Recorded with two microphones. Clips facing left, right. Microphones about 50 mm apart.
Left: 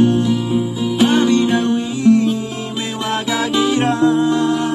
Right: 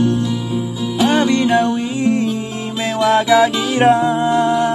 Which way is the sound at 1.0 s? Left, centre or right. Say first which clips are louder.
Even; right.